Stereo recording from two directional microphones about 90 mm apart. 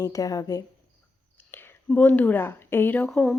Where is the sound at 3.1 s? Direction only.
5° left (ahead or behind).